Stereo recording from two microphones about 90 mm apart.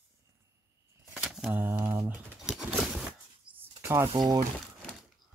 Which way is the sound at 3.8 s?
30° right (ahead or behind).